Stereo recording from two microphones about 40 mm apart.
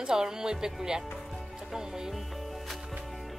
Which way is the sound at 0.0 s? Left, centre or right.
Centre.